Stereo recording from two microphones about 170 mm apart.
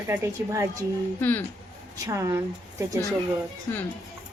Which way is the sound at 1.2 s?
10° left (ahead or behind).